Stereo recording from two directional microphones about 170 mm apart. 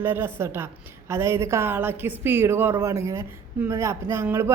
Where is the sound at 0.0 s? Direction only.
15° right (ahead or behind).